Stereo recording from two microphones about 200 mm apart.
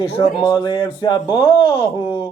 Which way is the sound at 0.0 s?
25° left (ahead or behind).